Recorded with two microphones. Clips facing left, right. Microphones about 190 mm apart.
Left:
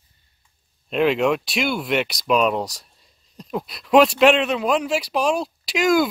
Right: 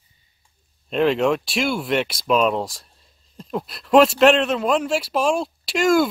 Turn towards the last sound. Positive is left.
turn(degrees=0)  # may be behind; listen again after turning